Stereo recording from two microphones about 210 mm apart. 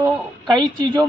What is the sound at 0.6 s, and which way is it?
Speech, 20° right (ahead or behind).